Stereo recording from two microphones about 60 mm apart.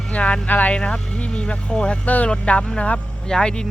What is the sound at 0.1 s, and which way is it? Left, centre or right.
Speech, centre.